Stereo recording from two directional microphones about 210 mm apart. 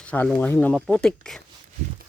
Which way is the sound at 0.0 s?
5° left (ahead or behind).